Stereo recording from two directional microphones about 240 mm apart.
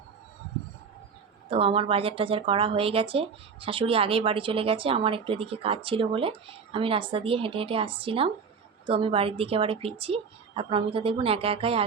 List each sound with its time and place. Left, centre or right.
1.5 s speech: right